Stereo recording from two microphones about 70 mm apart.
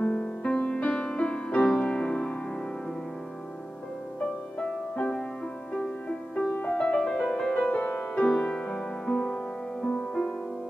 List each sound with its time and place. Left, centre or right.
0.0 s music: left
4.2 s music: centre
7.7 s music: left